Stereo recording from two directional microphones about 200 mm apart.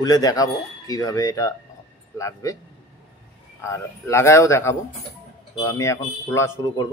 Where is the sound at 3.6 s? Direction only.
15° left (ahead or behind).